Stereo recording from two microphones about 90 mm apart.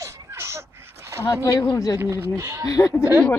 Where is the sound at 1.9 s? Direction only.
30° right (ahead or behind).